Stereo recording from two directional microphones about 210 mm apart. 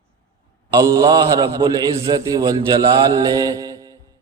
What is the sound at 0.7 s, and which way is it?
A man's voice, 15° right (ahead or behind).